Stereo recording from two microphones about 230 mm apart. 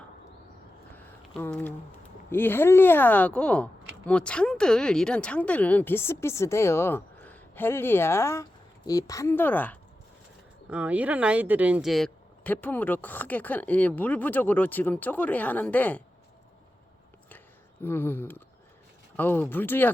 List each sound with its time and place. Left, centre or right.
0.9 s a sound: centre
2.3 s speech: centre
10.7 s speech: centre
17.8 s speech: centre